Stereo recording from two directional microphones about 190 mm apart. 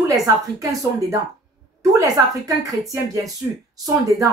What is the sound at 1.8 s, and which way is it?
Speech, 20° right (ahead or behind).